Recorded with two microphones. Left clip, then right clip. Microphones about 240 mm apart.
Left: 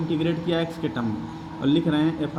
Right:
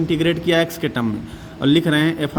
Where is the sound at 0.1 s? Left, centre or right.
Right.